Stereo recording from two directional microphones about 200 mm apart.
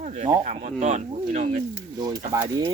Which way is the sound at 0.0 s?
40° right (ahead or behind).